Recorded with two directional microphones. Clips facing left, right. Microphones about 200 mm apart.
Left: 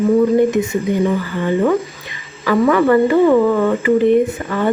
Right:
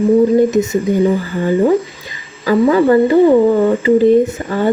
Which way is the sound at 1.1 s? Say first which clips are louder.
Right 3 dB; 35° right (ahead or behind).